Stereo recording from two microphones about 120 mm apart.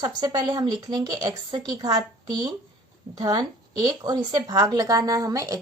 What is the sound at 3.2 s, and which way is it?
A woman's voice, 35° right (ahead or behind).